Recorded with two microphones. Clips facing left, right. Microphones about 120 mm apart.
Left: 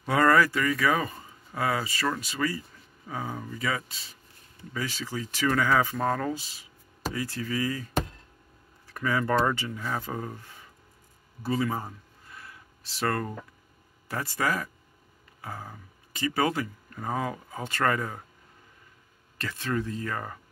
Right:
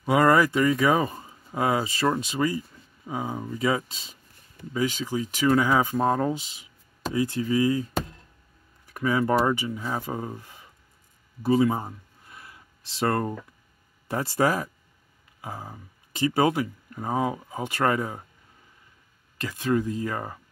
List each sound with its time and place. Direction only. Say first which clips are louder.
0.0 s speech: right 2 dB; 15° right (ahead or behind)
8.8 s speech: right 4 dB; 15° right (ahead or behind)
12.4 s a sound: even; 20° right (ahead or behind)
14.0 s speech: right 6 dB; 25° right (ahead or behind)
15.4 s speech: right 2 dB; 15° right (ahead or behind)
19.4 s speech: right 5 dB; 15° right (ahead or behind)